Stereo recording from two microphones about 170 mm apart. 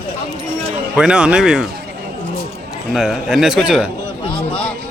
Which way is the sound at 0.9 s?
5° right (ahead or behind).